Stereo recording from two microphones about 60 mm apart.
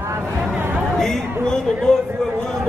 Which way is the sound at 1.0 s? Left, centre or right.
Centre.